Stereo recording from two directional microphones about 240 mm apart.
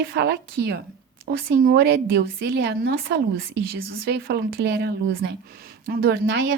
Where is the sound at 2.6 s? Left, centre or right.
Right.